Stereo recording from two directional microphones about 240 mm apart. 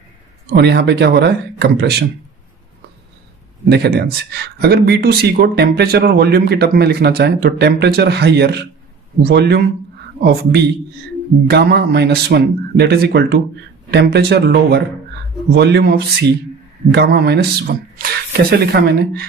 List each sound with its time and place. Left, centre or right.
0.5 s speech: right
3.7 s speech: right